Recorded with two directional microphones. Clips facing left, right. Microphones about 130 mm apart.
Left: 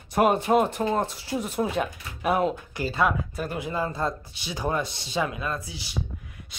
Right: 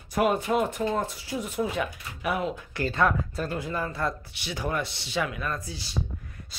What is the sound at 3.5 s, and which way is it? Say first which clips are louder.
Speech: left 2 dB; 20° left (ahead or behind).